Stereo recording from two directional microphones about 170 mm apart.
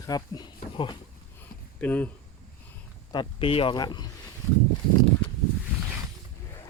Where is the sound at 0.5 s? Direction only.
30° left (ahead or behind).